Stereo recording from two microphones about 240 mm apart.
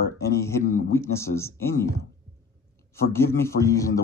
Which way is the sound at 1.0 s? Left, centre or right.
Centre.